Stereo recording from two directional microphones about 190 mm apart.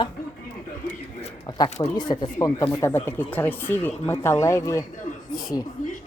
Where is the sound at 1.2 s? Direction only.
20° left (ahead or behind).